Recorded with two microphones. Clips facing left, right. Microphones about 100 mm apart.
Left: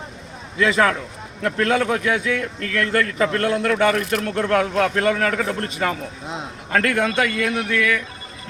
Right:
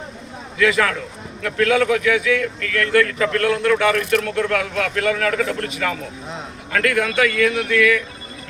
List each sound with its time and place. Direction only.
0.6 s a man's voice: 30° left (ahead or behind)